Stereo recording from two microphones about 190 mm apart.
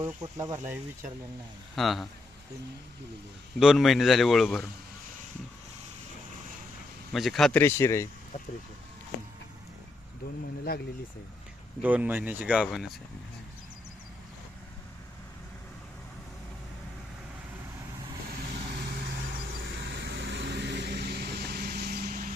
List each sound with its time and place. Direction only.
0.0 s speech: 20° right (ahead or behind)
1.7 s a man's voice: centre (ahead or behind)
3.6 s a man's voice: centre (ahead or behind)
7.1 s a man's voice: centre (ahead or behind)
10.7 s speech: 50° left (ahead or behind)
11.8 s speech: 10° right (ahead or behind)
20.0 s vehicle: 65° right (ahead or behind)